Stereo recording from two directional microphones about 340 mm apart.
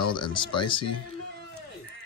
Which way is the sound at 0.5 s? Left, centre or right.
Centre.